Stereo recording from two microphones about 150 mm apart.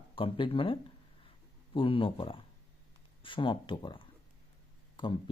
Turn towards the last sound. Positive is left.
turn(degrees=30)  # may be behind; listen again after turning